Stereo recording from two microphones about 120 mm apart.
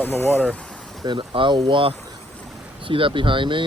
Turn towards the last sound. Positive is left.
turn(degrees=-45)  # may be behind; listen again after turning